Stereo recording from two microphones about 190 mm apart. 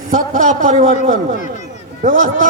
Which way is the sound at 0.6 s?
45° right (ahead or behind).